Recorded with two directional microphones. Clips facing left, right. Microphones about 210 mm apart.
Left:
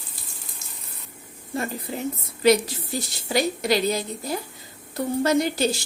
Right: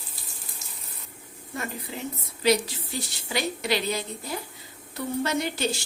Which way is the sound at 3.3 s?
40° left (ahead or behind).